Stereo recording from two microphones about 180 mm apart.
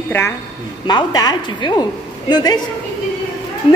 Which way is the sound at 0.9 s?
25° left (ahead or behind).